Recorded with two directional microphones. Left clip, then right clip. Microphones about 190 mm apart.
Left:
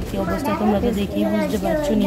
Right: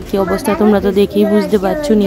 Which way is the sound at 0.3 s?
35° right (ahead or behind).